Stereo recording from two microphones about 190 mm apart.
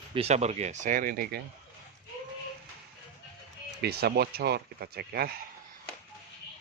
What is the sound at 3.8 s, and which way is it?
Speech, 55° right (ahead or behind).